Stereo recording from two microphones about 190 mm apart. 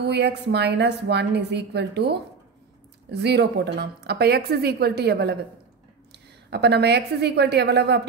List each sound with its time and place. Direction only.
0.0 s a woman's voice: 60° right (ahead or behind)